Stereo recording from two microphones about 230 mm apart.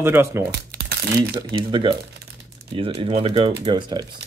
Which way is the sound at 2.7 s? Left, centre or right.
Right.